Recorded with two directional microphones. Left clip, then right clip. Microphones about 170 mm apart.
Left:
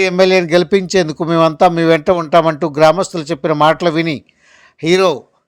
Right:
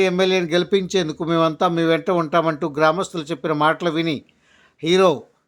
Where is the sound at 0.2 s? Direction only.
30° left (ahead or behind).